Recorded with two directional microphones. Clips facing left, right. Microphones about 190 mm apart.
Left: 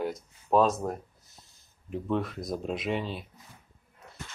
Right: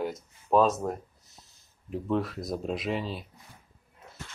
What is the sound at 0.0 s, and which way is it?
Speech, centre (ahead or behind).